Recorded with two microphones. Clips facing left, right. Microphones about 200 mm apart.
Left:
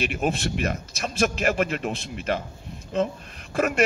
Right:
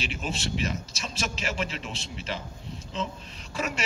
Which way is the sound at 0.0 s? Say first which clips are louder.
Left 8 dB; 55° left (ahead or behind).